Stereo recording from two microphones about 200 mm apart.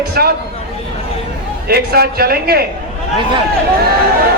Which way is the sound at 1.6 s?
50° right (ahead or behind).